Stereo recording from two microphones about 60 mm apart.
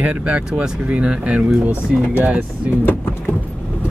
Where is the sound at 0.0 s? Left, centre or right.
Right.